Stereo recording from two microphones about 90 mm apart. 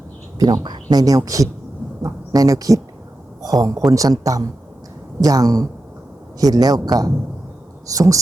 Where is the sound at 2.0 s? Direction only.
40° right (ahead or behind).